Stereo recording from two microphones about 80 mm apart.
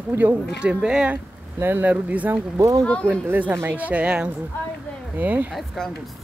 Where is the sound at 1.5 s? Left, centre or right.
Right.